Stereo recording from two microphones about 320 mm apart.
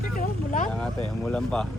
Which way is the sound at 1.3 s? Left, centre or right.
Centre.